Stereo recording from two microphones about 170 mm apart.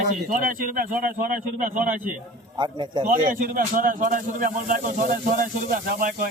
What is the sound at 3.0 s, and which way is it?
A man's voice, 55° right (ahead or behind).